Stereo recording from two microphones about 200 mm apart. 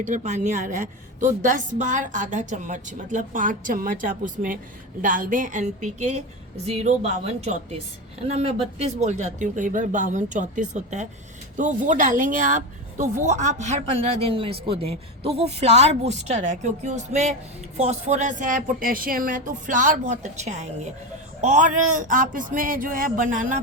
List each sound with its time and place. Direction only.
0.0 s speech: 35° right (ahead or behind)